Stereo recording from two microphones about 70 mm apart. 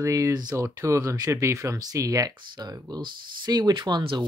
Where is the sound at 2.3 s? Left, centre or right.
Right.